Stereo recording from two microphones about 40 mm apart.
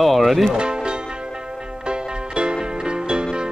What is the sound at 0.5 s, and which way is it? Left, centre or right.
Music, right.